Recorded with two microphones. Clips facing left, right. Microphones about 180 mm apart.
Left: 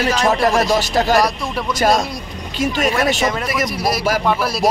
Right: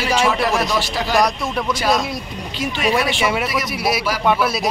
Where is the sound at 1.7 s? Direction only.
45° left (ahead or behind).